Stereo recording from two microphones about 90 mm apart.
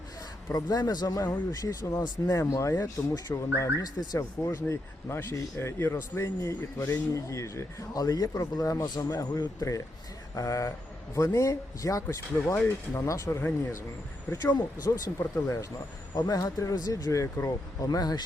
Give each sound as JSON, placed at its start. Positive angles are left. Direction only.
{"t": 0.5, "sound": "a man's voice", "side_deg": 45}
{"t": 4.2, "sound": "speech", "side_deg": 30}
{"t": 14.4, "sound": "speech", "side_deg": 40}
{"t": 15.2, "sound": "speech", "side_deg": 20}
{"t": 16.1, "sound": "speech", "side_deg": 45}
{"t": 17.8, "sound": "a man's voice", "side_deg": 45}